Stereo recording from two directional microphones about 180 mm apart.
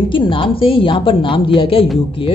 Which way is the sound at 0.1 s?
30° left (ahead or behind).